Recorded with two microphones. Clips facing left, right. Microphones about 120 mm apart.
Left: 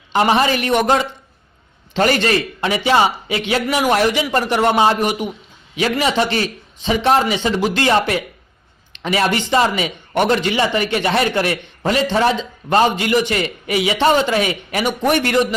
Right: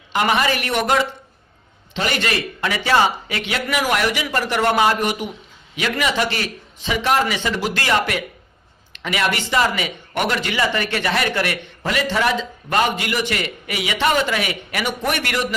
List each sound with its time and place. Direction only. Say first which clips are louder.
0.1 s a man's voice: left 4 dB; 30° left (ahead or behind)
1.9 s a man's voice: left 8 dB; 45° left (ahead or behind)
2.1 s a man's voice: left 5 dB; 30° left (ahead or behind)
4.9 s speech: left 3 dB; 15° left (ahead or behind)
5.7 s a man's voice: left 4 dB; 30° left (ahead or behind)
7.3 s a man's voice: left 5 dB; 20° left (ahead or behind)